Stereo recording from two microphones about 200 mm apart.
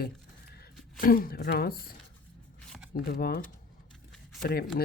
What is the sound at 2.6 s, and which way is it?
Shuffling cards, centre (ahead or behind).